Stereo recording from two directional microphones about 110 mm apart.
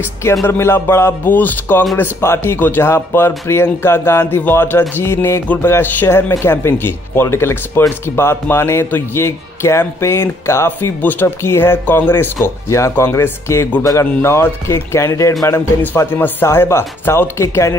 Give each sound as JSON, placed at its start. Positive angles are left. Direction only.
{"t": 0.2, "sound": "a man's voice", "side_deg": 25}